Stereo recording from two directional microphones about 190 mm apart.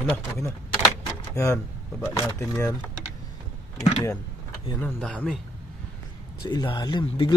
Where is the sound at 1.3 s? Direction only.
15° left (ahead or behind).